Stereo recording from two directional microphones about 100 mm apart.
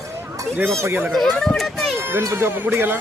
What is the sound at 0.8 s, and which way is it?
Speech, 25° right (ahead or behind).